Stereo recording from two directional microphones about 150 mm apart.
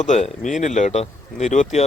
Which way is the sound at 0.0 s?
55° left (ahead or behind).